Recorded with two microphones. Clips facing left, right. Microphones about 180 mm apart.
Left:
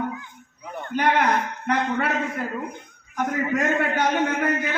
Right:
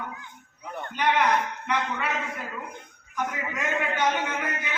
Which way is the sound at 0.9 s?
50° left (ahead or behind).